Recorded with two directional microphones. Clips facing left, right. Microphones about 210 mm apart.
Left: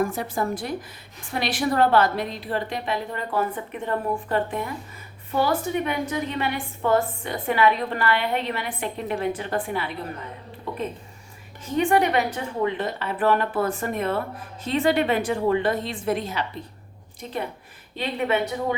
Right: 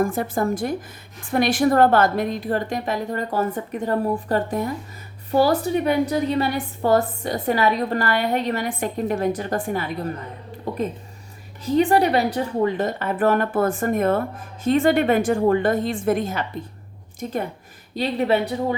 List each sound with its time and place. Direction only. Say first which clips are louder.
0.0 s a woman's voice: right 3 dB; 50° right (ahead or behind)
11.6 s a woman's voice: right 3 dB; 35° right (ahead or behind)